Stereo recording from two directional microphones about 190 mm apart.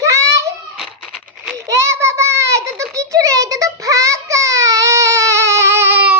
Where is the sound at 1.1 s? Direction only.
Centre (ahead or behind).